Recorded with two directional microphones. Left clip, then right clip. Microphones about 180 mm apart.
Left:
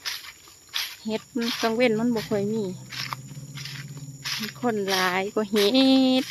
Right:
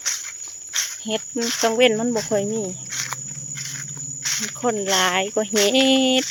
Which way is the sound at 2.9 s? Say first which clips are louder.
Right 5 dB; 65° right (ahead or behind).